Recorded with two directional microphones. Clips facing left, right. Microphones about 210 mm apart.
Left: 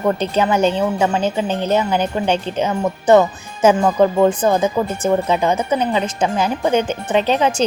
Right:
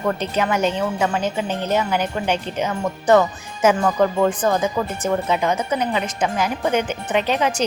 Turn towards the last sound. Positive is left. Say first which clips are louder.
# left 4 dB
turn(degrees=30)  # may be behind; listen again after turning